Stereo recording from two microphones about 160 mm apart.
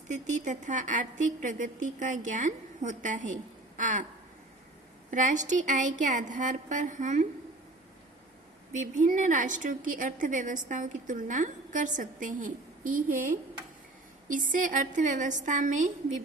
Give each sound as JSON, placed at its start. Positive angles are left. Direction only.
{"t": 0.1, "sound": "a woman's voice", "side_deg": -50}
{"t": 3.8, "sound": "a sound", "side_deg": -50}
{"t": 5.1, "sound": "a woman's voice", "side_deg": -50}
{"t": 8.7, "sound": "a woman's voice", "side_deg": -50}